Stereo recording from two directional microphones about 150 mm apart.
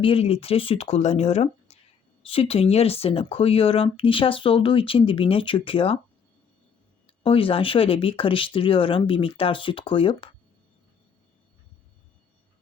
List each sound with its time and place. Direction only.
0.0 s speech: 40° left (ahead or behind)
7.1 s speech: 40° left (ahead or behind)